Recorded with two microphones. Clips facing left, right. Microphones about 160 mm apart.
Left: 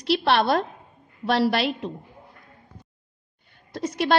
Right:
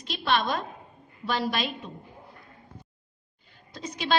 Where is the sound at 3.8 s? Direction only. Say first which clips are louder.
Left 5 dB; 60° left (ahead or behind).